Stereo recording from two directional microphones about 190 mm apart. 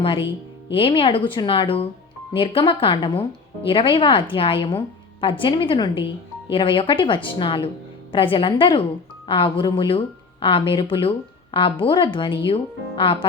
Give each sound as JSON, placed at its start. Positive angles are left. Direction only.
{"t": 0.0, "sound": "speech", "side_deg": 30}